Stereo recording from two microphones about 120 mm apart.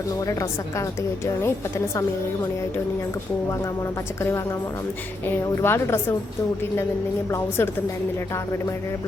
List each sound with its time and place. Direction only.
5.3 s speech: 20° left (ahead or behind)
7.3 s speech: 20° left (ahead or behind)